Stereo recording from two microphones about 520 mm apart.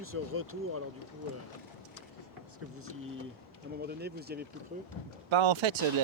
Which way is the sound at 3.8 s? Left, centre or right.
Centre.